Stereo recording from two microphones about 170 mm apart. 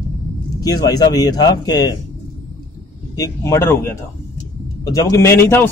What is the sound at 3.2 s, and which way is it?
A man's voice, 15° left (ahead or behind).